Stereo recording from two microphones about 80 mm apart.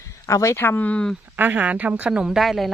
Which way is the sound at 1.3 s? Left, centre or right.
Right.